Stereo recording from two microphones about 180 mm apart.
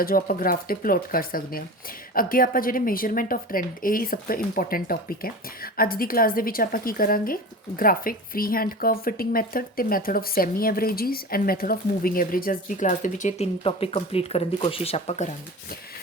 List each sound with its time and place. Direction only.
0.0 s speech: 55° left (ahead or behind); by 15.3 s 35° left (ahead or behind)